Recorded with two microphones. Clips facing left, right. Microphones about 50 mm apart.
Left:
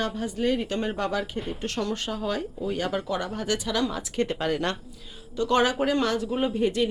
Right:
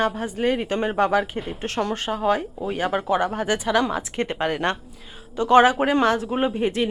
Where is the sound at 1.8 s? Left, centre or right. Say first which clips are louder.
Right 6 dB; right.